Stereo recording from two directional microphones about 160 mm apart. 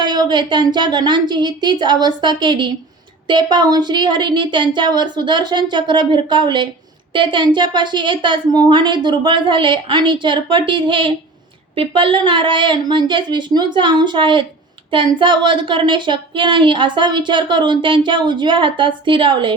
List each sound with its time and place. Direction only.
0.0 s a woman's voice: 25° right (ahead or behind)